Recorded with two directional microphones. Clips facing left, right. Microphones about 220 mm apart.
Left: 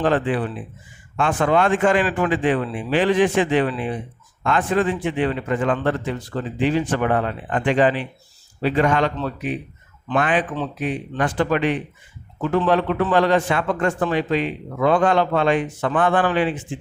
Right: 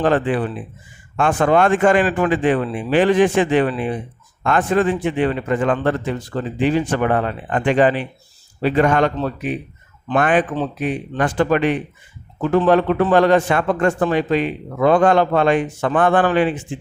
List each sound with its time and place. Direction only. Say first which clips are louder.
0.0 s a man's voice: right 2 dB; 50° right (ahead or behind)